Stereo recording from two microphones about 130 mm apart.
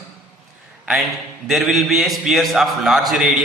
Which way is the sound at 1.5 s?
Centre (ahead or behind).